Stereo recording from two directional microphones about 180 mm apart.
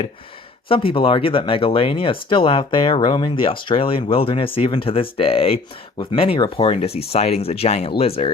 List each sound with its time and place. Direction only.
0.7 s speech: 30° left (ahead or behind)